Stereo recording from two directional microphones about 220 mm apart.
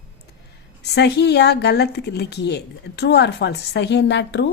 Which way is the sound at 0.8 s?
50° left (ahead or behind).